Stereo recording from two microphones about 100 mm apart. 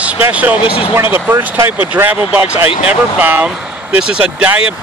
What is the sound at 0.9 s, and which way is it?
Speech, 20° right (ahead or behind).